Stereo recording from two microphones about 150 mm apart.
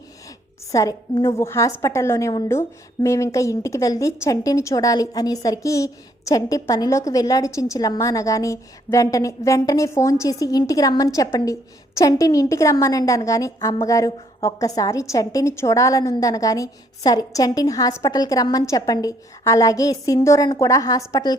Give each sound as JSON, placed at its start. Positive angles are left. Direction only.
{"t": 0.7, "sound": "a woman's voice", "side_deg": 20}